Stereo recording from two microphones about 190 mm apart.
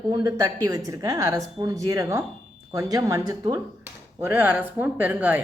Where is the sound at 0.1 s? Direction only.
20° right (ahead or behind).